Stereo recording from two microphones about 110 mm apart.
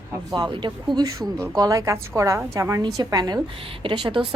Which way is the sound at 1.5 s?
30° right (ahead or behind).